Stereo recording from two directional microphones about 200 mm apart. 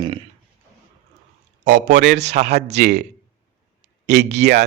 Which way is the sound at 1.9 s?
40° right (ahead or behind).